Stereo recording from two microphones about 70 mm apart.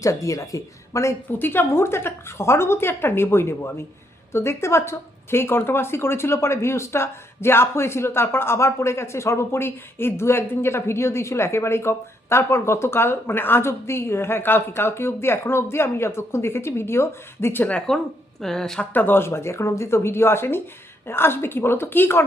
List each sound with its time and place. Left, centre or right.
0.0 s speech: left
1.4 s a woman's voice: left
17.7 s speech: centre
18.9 s a woman's voice: left